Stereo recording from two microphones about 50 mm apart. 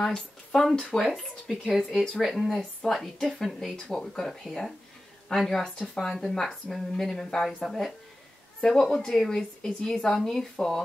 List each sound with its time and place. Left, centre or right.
0.0 s a woman's voice: centre
5.8 s a woman's voice: centre